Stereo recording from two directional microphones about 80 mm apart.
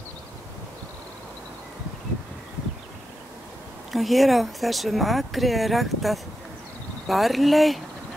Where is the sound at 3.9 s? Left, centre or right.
Centre.